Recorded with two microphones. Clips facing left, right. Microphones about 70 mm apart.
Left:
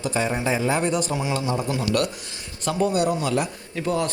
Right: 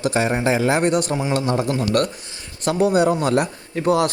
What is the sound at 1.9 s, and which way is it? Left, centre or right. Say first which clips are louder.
Speech: right 4 dB; right.